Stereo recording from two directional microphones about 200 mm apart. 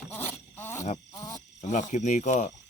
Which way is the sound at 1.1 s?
15° left (ahead or behind).